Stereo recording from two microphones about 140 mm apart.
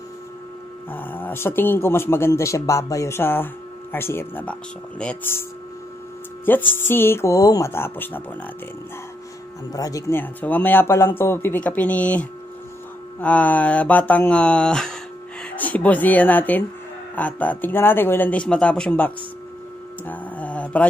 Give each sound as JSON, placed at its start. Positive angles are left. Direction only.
{"t": 0.8, "sound": "a man's voice", "side_deg": 15}
{"t": 6.7, "sound": "a man's voice", "side_deg": 15}
{"t": 9.7, "sound": "a man's voice", "side_deg": 25}
{"t": 20.1, "sound": "a sound", "side_deg": 10}